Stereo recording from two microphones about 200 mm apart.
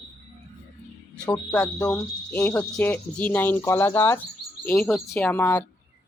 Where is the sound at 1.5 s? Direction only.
5° left (ahead or behind).